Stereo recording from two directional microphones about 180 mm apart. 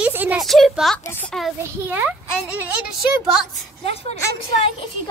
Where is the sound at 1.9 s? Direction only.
10° right (ahead or behind).